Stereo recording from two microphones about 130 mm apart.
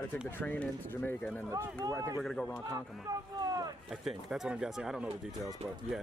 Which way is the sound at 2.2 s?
5° left (ahead or behind).